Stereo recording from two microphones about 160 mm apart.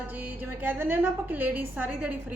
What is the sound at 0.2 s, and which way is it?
Speech, 10° right (ahead or behind).